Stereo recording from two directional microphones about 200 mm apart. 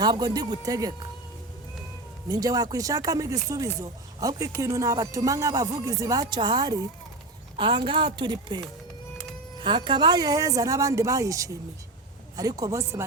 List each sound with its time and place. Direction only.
0.0 s a woman's voice: 20° right (ahead or behind)
2.3 s a woman's voice: 20° right (ahead or behind)